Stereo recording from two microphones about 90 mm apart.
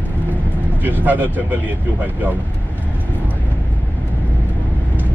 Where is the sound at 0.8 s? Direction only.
20° right (ahead or behind).